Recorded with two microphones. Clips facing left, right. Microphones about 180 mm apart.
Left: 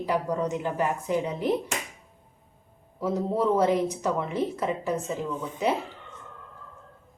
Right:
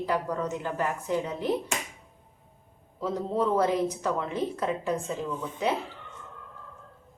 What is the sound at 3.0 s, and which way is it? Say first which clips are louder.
A woman's voice: left 2 dB; 10° left (ahead or behind).